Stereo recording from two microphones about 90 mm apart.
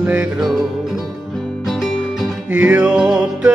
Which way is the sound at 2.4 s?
20° right (ahead or behind).